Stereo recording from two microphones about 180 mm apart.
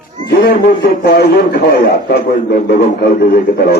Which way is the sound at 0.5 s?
60° left (ahead or behind).